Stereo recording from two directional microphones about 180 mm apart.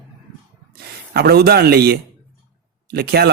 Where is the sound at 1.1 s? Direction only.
60° right (ahead or behind).